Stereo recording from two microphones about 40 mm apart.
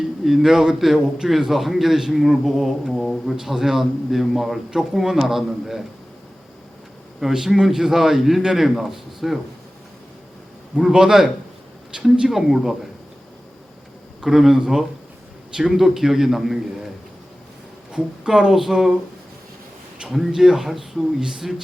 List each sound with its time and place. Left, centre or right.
0.3 s speech: centre
7.2 s speech: centre
10.8 s speech: centre
12.3 s speech: centre
14.2 s speech: centre
17.9 s speech: centre
20.1 s speech: centre